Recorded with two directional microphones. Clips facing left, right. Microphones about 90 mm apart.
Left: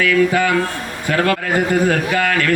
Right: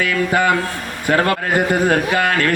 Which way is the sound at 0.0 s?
35° right (ahead or behind).